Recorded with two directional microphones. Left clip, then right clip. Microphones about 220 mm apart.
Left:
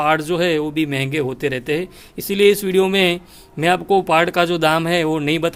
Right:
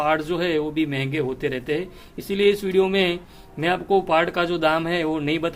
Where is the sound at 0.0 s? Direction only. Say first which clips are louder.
Left 5 dB; 45° left (ahead or behind).